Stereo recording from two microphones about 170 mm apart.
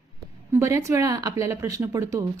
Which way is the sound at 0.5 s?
15° right (ahead or behind).